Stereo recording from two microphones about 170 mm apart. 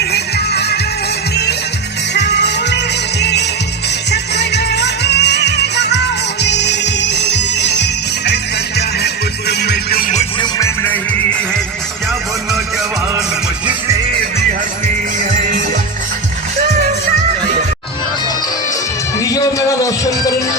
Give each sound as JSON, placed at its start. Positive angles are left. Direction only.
{"t": 0.0, "sound": "music", "side_deg": 75}
{"t": 2.1, "sound": "music", "side_deg": 90}
{"t": 9.5, "sound": "music", "side_deg": 75}
{"t": 19.2, "sound": "music", "side_deg": 20}